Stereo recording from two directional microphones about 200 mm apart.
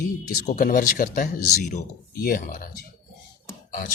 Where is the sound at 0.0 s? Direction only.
45° left (ahead or behind).